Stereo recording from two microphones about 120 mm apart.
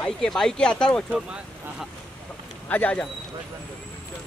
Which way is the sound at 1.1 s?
10° right (ahead or behind).